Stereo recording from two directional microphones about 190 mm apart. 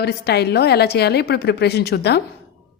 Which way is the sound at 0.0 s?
60° left (ahead or behind).